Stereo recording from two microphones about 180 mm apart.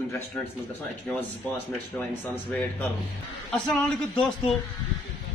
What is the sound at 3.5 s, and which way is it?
Speech, 5° left (ahead or behind).